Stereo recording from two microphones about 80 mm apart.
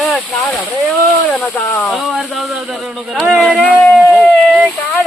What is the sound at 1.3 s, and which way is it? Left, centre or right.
Speech, centre.